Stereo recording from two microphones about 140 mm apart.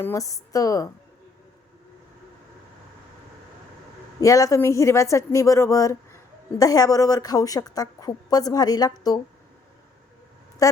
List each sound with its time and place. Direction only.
0.0 s a woman's voice: 25° left (ahead or behind)
4.2 s a woman's voice: 25° left (ahead or behind)
10.6 s a woman's voice: 25° left (ahead or behind)